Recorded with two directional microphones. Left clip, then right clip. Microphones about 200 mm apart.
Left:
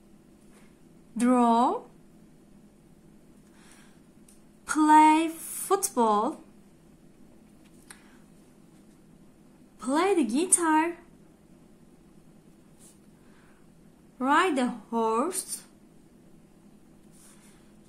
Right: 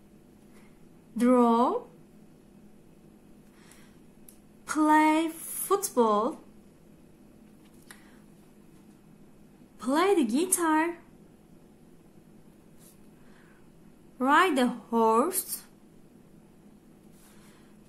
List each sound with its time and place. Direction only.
1.1 s speech: 5° left (ahead or behind)
4.6 s speech: centre (ahead or behind)
9.8 s speech: 10° right (ahead or behind)
14.1 s speech: 15° right (ahead or behind)